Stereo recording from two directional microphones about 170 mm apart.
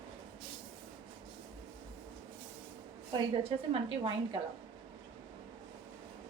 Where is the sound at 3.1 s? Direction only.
35° right (ahead or behind).